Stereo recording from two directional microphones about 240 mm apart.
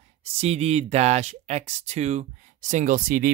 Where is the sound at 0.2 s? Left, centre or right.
Right.